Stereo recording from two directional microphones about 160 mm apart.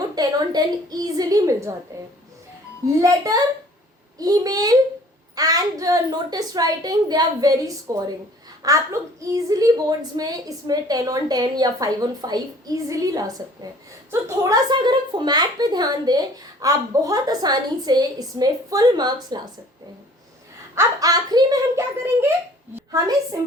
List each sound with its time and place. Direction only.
0.2 s a woman's voice: 25° right (ahead or behind)
3.0 s a woman's voice: 20° right (ahead or behind)
20.7 s a woman's voice: 20° right (ahead or behind)